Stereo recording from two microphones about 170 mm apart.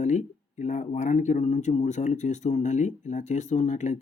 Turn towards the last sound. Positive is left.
turn(degrees=45)  # may be behind; listen again after turning